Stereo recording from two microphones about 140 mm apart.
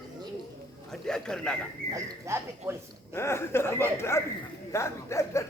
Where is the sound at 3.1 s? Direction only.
20° left (ahead or behind).